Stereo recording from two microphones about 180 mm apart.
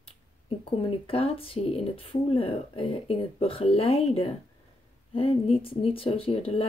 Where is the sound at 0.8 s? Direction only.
30° left (ahead or behind).